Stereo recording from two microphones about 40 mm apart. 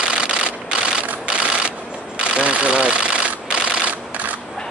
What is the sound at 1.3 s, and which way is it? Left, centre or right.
Engine, right.